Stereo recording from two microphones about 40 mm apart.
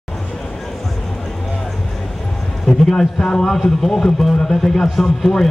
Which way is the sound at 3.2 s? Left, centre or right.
Left.